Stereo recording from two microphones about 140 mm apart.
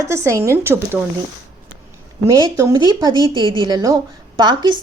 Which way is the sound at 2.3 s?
25° right (ahead or behind).